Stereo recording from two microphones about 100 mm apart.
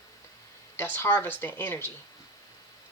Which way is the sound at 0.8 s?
20° left (ahead or behind).